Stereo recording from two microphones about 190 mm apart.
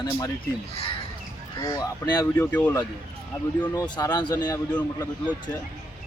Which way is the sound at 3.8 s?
20° left (ahead or behind).